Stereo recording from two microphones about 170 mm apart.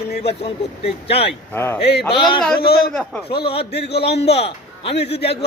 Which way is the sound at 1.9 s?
75° left (ahead or behind).